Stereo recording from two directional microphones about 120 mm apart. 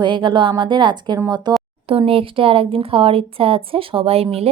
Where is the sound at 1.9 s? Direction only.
50° right (ahead or behind).